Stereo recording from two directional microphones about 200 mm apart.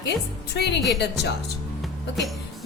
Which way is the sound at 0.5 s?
55° left (ahead or behind).